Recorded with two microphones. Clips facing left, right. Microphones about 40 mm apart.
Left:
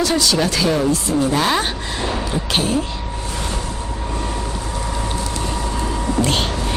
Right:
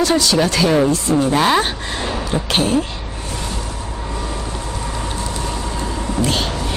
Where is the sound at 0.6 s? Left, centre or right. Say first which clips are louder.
Right 3 dB; centre.